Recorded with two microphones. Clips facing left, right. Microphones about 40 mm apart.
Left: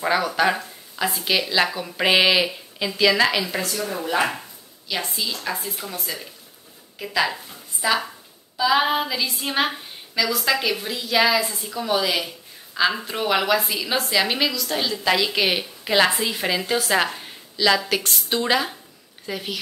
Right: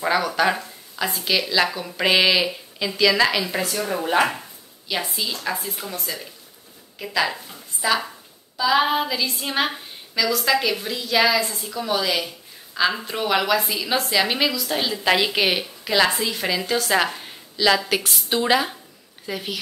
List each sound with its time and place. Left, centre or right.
0.0 s a woman's voice: centre
3.6 s speech: right
4.8 s a woman's voice: centre
15.8 s a woman's voice: centre